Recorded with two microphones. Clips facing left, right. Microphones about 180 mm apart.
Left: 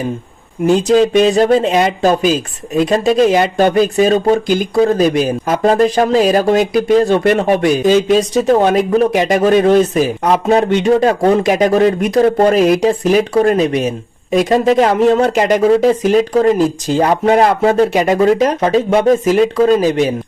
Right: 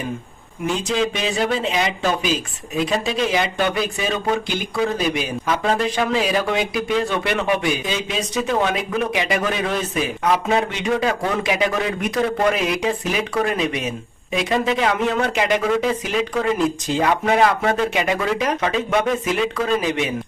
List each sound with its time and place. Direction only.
0.7 s speech: 40° left (ahead or behind)